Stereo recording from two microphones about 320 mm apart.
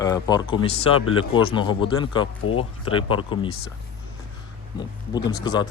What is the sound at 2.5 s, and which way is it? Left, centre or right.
Speech, left.